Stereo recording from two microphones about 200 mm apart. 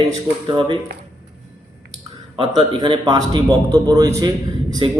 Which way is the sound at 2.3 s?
25° right (ahead or behind).